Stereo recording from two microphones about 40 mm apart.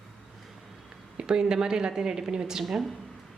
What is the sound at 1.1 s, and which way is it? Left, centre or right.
A woman's voice, centre.